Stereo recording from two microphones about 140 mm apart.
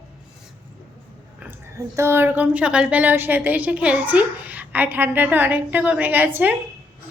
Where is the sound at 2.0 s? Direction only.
15° right (ahead or behind).